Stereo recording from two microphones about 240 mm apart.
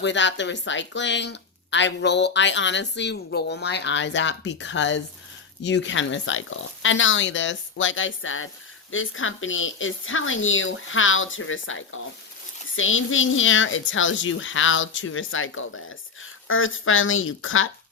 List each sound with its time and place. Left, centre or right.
0.0 s a woman's voice: left